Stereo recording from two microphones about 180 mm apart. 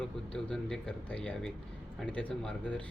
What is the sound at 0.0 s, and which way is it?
Speech, 5° left (ahead or behind).